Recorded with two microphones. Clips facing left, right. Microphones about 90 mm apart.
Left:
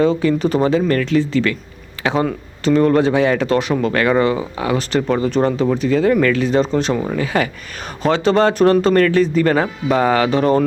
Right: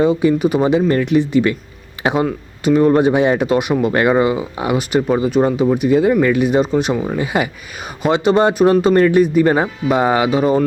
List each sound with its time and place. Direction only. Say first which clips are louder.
0.0 s speech: right 2 dB; 15° right (ahead or behind)